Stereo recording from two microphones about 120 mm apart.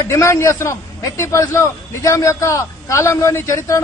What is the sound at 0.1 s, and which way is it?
A man's voice, 25° left (ahead or behind).